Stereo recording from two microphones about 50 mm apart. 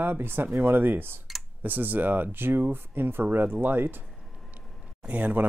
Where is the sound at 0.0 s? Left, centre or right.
Right.